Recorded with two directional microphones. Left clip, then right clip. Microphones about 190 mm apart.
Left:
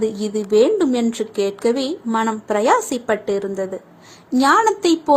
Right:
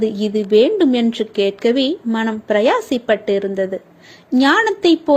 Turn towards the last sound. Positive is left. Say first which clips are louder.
# right 1 dB
turn(degrees=-25)  # may be behind; listen again after turning